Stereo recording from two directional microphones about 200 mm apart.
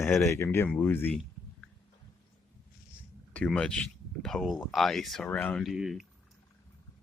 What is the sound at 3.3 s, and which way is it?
Speech, 5° left (ahead or behind).